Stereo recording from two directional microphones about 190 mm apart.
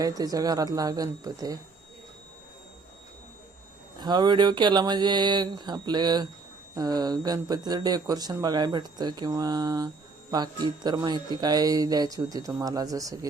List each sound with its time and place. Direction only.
0.0 s speech: 20° right (ahead or behind)
4.0 s speech: 25° right (ahead or behind)